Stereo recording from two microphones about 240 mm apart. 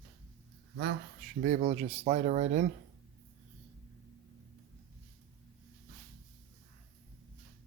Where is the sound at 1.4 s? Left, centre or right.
Right.